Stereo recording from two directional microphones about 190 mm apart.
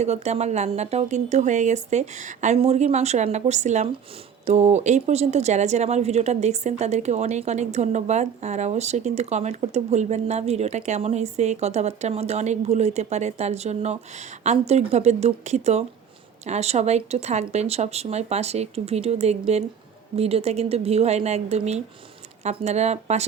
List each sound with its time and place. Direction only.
0.0 s speech: 35° right (ahead or behind)